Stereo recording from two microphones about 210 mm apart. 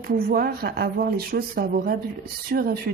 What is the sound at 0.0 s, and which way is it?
Speech, 45° right (ahead or behind).